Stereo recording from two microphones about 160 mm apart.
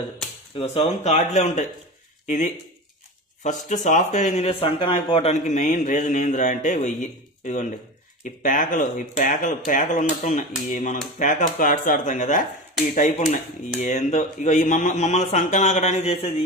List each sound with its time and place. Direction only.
0.6 s speech: 45° left (ahead or behind)
13.7 s speech: 45° left (ahead or behind)